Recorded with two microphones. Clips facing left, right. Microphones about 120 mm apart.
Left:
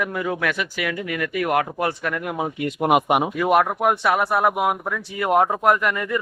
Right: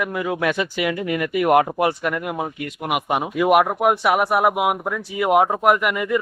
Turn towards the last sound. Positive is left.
turn(degrees=-10)  # may be behind; listen again after turning